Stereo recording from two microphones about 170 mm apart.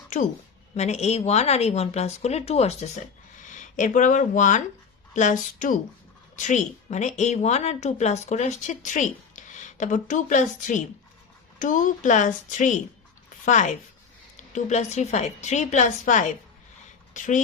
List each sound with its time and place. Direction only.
0.1 s a woman's voice: 45° left (ahead or behind)